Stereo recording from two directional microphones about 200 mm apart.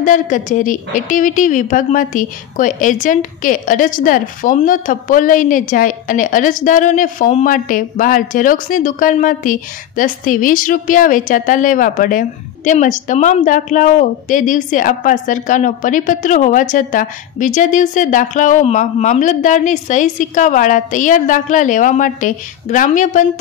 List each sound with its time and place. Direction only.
0.0 s a woman's voice: 40° left (ahead or behind)